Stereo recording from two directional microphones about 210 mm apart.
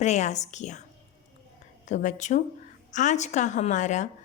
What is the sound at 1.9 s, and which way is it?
A woman's voice, 35° left (ahead or behind).